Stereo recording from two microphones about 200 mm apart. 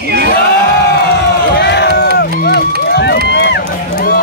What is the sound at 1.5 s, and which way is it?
Run, 60° left (ahead or behind).